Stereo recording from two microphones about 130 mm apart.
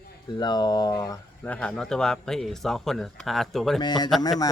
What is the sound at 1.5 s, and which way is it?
Speech, 5° left (ahead or behind).